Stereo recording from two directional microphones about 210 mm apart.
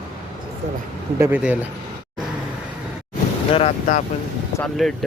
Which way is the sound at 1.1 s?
10° right (ahead or behind).